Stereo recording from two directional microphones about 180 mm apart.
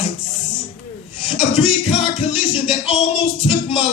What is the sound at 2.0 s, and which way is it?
Music, 30° left (ahead or behind).